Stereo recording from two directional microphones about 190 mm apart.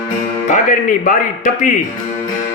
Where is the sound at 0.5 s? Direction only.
40° left (ahead or behind).